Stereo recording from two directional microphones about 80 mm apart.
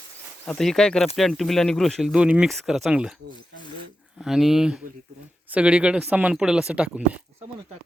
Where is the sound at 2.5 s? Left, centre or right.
Centre.